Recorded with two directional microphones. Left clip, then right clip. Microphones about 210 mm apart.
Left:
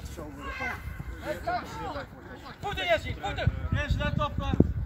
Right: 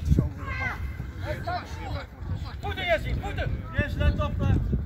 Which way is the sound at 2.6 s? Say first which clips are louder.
Right 1 dB; 45° right (ahead or behind).